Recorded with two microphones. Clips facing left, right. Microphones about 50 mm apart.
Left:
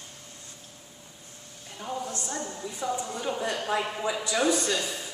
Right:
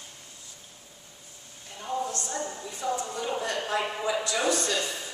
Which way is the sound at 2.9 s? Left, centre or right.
Centre.